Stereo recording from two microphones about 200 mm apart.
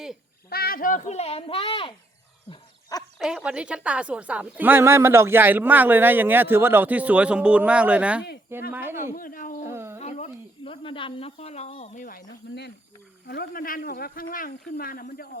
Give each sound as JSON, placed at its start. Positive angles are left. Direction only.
{"t": 0.5, "sound": "speech", "side_deg": 50}
{"t": 3.2, "sound": "speech", "side_deg": -5}
{"t": 9.1, "sound": "speech", "side_deg": 45}
{"t": 9.6, "sound": "a sound", "side_deg": -15}
{"t": 10.0, "sound": "speech", "side_deg": 35}